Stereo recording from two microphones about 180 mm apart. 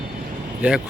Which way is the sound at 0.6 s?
5° right (ahead or behind).